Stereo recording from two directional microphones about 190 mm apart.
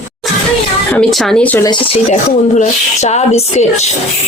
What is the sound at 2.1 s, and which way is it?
Speech, 35° left (ahead or behind).